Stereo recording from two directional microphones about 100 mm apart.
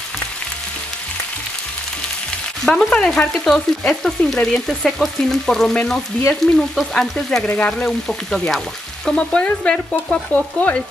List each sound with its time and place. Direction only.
2.6 s frying: 5° left (ahead or behind)
7.4 s frying: 15° left (ahead or behind)
8.1 s frying: centre (ahead or behind)